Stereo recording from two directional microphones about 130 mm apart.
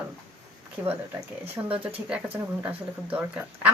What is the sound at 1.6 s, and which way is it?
A woman's voice, 20° right (ahead or behind).